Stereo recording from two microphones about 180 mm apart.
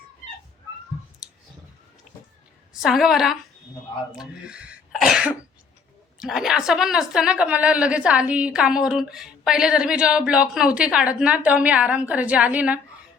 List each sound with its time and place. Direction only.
1.2 s clicking: 5° right (ahead or behind)
2.7 s a woman's voice: centre (ahead or behind)